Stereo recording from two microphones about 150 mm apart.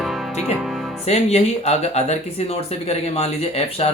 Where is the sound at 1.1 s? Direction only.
45° left (ahead or behind).